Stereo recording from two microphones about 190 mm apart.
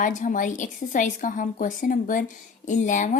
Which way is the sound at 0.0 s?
45° left (ahead or behind).